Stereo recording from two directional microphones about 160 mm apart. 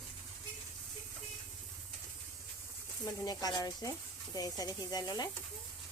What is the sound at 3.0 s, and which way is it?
Speech, 25° left (ahead or behind).